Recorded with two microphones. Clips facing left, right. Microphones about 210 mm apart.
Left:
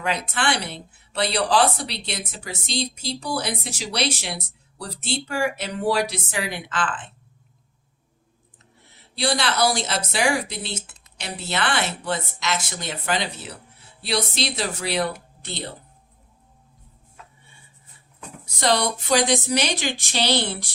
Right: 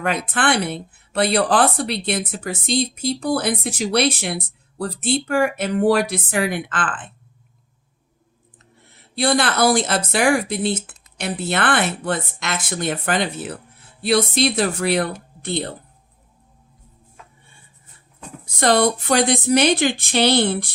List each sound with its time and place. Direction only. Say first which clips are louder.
0.0 s speech: right 4 dB; 55° right (ahead or behind)
9.1 s speech: right 4 dB; 50° right (ahead or behind)
18.4 s speech: right 5 dB; 50° right (ahead or behind)